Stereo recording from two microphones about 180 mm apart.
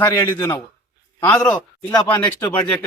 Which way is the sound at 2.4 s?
10° left (ahead or behind).